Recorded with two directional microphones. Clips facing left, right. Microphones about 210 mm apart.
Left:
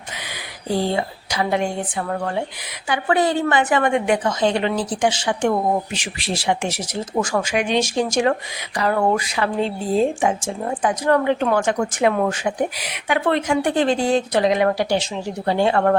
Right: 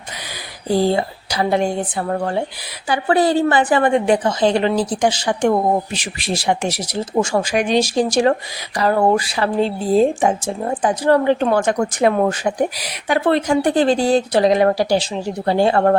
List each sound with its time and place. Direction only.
0.7 s speech: 35° right (ahead or behind)